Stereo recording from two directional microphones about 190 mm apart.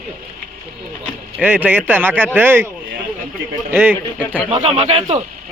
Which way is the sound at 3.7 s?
10° right (ahead or behind).